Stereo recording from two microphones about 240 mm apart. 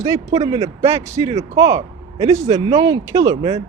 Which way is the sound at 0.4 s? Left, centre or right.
Right.